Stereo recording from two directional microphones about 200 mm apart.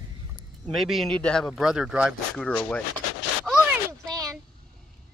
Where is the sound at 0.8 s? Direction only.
Centre (ahead or behind).